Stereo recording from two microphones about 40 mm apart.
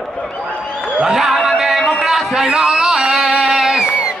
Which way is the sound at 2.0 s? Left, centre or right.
Centre.